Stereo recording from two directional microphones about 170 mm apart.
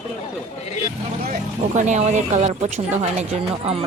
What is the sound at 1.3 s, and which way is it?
Speech, 45° right (ahead or behind).